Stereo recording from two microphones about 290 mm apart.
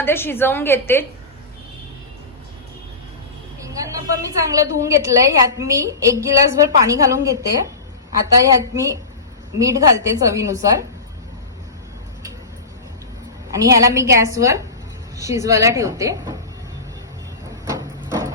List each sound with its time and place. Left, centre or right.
0.0 s a woman's voice: centre
3.6 s a woman's voice: centre
8.4 s a woman's voice: centre
13.5 s a woman's voice: centre
17.7 s a sound: centre